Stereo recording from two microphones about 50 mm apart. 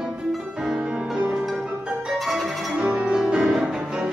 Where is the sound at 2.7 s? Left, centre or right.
Centre.